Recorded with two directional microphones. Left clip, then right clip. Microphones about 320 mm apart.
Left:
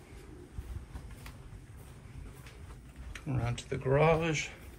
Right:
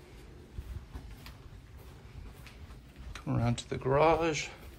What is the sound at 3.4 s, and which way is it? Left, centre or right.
Speech, centre.